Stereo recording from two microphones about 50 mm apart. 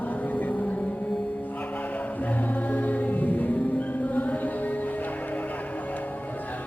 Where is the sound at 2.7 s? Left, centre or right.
Left.